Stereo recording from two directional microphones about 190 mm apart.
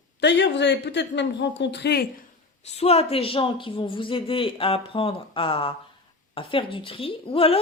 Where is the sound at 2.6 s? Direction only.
35° left (ahead or behind).